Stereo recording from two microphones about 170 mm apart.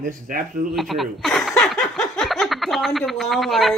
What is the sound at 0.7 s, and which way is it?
Snicker, centre (ahead or behind).